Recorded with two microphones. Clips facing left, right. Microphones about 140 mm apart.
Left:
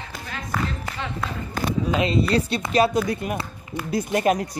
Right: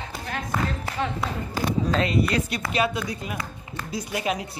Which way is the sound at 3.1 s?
60° left (ahead or behind).